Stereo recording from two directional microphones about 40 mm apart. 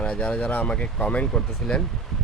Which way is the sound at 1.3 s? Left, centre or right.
Centre.